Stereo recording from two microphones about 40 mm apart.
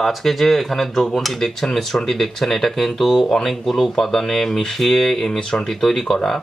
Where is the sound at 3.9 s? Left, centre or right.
Centre.